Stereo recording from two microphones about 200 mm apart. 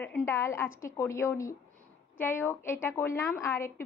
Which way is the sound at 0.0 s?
10° left (ahead or behind).